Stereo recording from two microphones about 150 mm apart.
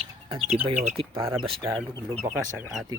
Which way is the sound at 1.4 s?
35° right (ahead or behind).